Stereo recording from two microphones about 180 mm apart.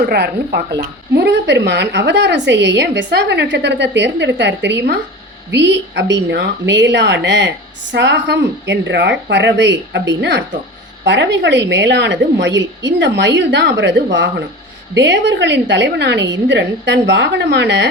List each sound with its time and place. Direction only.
0.0 s a woman's voice: 55° right (ahead or behind); by 17.8 s 70° right (ahead or behind)